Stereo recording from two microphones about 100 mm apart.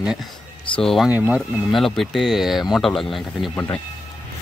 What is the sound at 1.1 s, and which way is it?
Speech, 15° right (ahead or behind).